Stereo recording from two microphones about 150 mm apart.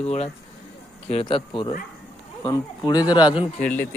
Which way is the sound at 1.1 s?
40° left (ahead or behind).